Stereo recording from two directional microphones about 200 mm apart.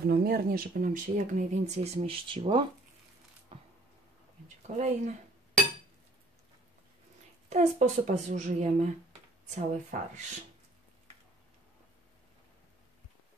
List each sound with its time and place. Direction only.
0.0 s speech: 50° right (ahead or behind); by 2.6 s 25° right (ahead or behind)
3.5 s a sound: 25° right (ahead or behind)
4.6 s speech: 35° right (ahead or behind)
7.4 s speech: 35° right (ahead or behind)